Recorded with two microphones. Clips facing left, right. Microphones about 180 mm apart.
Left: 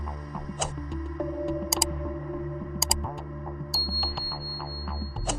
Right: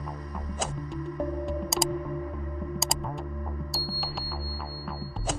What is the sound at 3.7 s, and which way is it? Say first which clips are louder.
Music: even; centre (ahead or behind).